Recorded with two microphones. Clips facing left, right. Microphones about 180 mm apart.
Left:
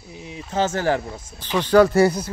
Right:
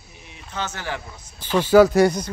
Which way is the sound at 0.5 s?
45° left (ahead or behind).